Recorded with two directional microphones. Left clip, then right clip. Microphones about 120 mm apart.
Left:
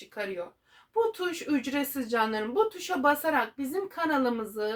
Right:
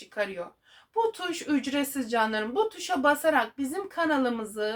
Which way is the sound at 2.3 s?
35° left (ahead or behind).